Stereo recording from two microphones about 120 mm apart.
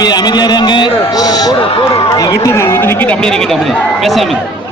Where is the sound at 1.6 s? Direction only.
50° left (ahead or behind).